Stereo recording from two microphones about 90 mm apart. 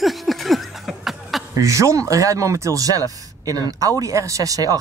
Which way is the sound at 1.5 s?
35° right (ahead or behind).